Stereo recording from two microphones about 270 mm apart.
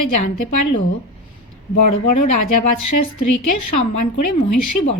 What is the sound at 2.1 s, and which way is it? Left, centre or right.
Speech, left.